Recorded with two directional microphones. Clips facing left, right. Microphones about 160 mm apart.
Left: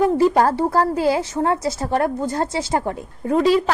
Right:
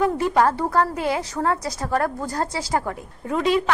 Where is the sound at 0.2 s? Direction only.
35° left (ahead or behind).